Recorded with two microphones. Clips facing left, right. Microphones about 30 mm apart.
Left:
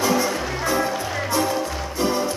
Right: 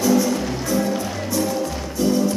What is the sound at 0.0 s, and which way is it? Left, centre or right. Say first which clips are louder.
Music: right 2 dB; left.